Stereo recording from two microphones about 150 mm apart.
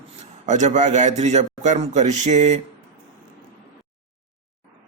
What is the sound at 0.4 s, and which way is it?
A man's voice, 55° right (ahead or behind).